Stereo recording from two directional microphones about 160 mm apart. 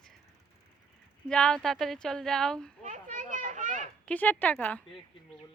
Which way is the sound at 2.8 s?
50° right (ahead or behind).